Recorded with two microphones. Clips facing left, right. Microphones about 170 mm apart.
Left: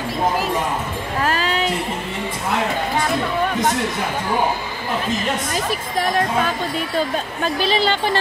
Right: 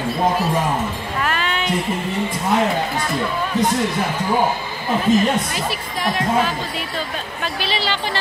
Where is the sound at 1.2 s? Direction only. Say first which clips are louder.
Left 3 dB; 35° left (ahead or behind).